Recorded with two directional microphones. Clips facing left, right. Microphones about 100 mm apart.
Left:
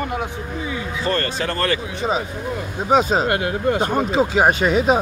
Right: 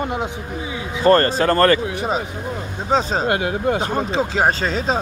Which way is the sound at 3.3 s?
20° right (ahead or behind).